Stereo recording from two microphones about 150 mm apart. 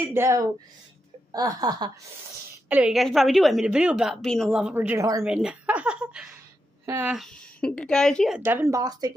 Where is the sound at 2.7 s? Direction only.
5° right (ahead or behind); by 5.2 s 20° right (ahead or behind).